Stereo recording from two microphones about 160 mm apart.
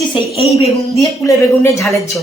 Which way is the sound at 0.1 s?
35° left (ahead or behind).